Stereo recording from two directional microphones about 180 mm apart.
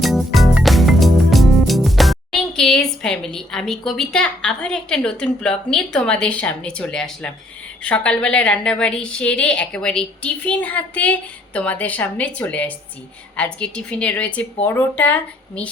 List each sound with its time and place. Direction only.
0.0 s music: centre (ahead or behind)
7.9 s a woman's voice: 5° left (ahead or behind)